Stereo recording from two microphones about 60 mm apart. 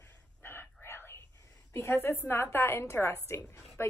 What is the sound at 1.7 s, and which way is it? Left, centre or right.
A woman's voice, left.